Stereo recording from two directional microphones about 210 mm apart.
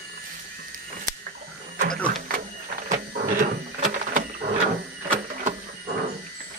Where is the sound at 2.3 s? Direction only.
40° right (ahead or behind).